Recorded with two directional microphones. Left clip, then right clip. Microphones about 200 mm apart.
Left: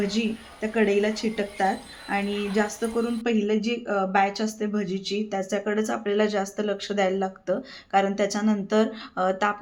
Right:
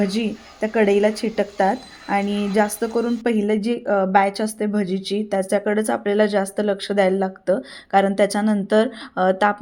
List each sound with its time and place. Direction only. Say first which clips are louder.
0.0 s speech: right 4 dB; 45° right (ahead or behind)